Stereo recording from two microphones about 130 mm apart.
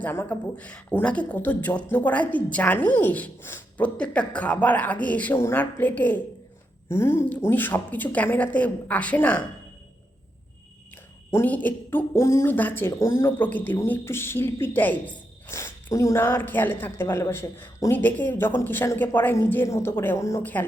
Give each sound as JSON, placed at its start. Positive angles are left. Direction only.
{"t": 0.0, "sound": "speech", "side_deg": 15}
{"t": 11.3, "sound": "speech", "side_deg": 15}